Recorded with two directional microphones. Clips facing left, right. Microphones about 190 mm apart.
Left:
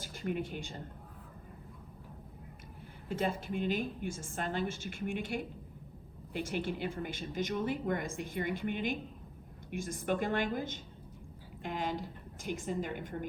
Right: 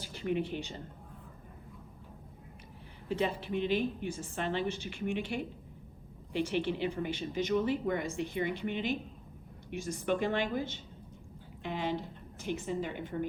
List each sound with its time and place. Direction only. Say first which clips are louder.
0.0 s speech: right 3 dB; 45° left (ahead or behind)
3.1 s a woman's voice: right 2 dB; 45° left (ahead or behind)
6.5 s a woman's voice: right 1 dB; 45° left (ahead or behind)